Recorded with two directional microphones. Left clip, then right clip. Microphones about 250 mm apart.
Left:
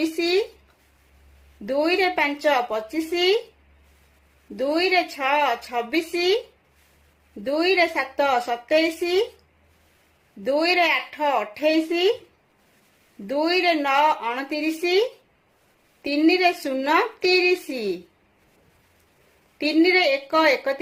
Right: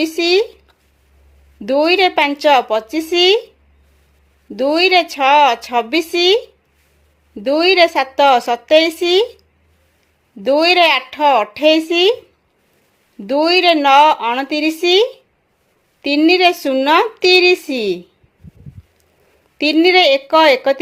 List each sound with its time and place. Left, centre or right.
0.0 s a woman's voice: right
1.6 s a woman's voice: right
4.5 s a woman's voice: right
7.4 s a woman's voice: right
10.4 s a woman's voice: right
13.2 s a woman's voice: right
19.5 s a woman's voice: right